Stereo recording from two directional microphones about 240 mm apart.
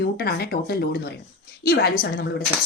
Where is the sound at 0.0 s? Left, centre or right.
Left.